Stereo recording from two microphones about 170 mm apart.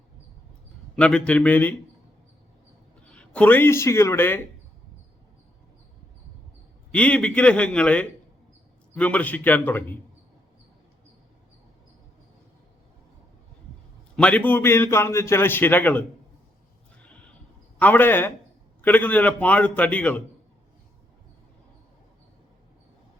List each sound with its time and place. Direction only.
0.9 s speech: 5° left (ahead or behind)
3.1 s a man's voice: 5° left (ahead or behind)
6.9 s a man's voice: 5° left (ahead or behind)
14.2 s a man's voice: 5° left (ahead or behind)
17.7 s a man's voice: 10° left (ahead or behind)